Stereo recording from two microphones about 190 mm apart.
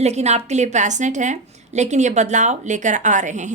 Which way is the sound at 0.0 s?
35° right (ahead or behind).